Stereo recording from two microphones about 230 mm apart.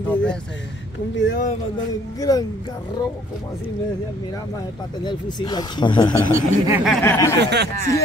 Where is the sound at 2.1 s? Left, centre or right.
Centre.